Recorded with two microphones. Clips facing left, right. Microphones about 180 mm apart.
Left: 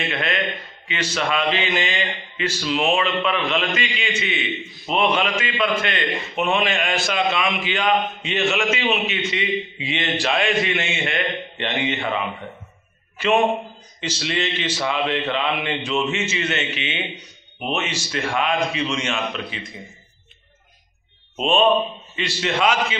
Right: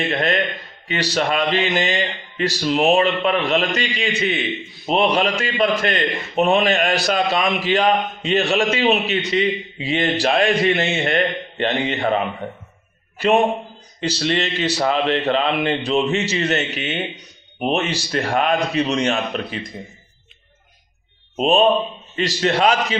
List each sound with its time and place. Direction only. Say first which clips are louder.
0.1 s a man's voice: right 4 dB; 40° right (ahead or behind)
14.0 s speech: right 4 dB; 40° right (ahead or behind)
21.4 s speech: right 2 dB; 40° right (ahead or behind)